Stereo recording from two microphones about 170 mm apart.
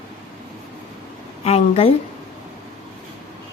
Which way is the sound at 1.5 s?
35° left (ahead or behind).